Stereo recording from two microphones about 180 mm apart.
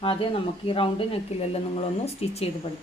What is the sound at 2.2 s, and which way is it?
Speech, 35° left (ahead or behind).